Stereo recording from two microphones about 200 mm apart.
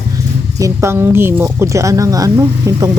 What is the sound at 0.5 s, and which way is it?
A woman's voice, 15° right (ahead or behind).